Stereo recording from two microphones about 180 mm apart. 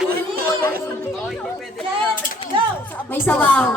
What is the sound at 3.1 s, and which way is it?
Speech, 10° left (ahead or behind).